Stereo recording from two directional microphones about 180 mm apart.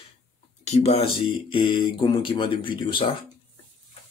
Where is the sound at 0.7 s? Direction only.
35° left (ahead or behind).